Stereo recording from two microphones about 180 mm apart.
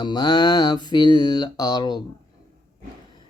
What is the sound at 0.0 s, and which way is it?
Mantra, 25° left (ahead or behind).